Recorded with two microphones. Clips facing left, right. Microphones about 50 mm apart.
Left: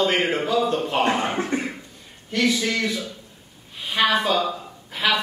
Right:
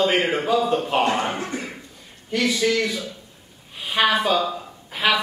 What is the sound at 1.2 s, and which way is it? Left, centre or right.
Speech, centre.